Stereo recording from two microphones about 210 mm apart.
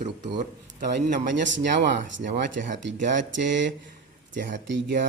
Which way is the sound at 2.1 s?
60° right (ahead or behind).